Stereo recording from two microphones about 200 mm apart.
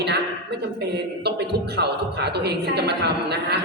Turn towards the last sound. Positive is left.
turn(degrees=-55)  # may be behind; listen again after turning